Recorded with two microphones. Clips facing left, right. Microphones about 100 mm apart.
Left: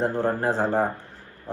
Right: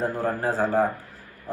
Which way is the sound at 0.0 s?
25° left (ahead or behind).